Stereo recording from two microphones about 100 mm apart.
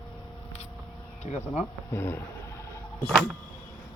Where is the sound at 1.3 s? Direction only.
90° left.